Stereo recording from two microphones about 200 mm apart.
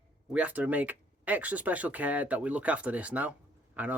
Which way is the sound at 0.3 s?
5° right (ahead or behind).